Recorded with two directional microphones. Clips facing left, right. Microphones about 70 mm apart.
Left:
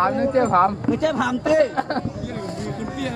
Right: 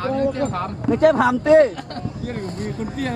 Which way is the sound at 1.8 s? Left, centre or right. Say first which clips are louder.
Left 8 dB; left.